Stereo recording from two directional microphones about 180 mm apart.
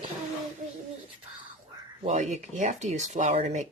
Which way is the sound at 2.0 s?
40° right (ahead or behind).